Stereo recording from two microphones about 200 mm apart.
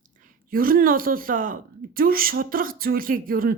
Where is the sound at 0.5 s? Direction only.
45° right (ahead or behind).